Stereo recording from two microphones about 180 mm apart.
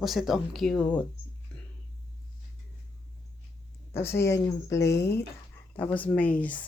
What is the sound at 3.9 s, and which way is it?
Speech, 15° left (ahead or behind).